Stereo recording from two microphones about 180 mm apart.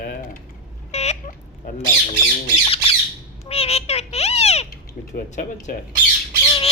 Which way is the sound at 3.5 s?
35° left (ahead or behind).